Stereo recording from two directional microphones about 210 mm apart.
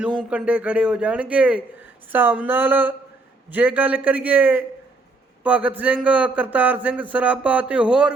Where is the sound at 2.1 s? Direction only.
10° right (ahead or behind).